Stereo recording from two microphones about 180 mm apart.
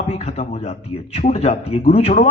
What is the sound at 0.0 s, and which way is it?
A man's voice, 35° left (ahead or behind).